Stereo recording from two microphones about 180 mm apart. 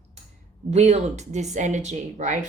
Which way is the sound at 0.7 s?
35° right (ahead or behind).